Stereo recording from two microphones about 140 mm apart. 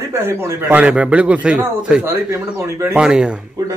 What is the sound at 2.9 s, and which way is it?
Speech, 5° right (ahead or behind).